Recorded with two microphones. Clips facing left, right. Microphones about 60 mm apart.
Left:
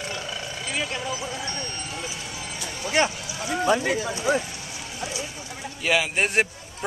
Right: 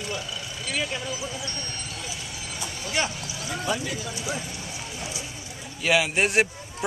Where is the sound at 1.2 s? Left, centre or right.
Left.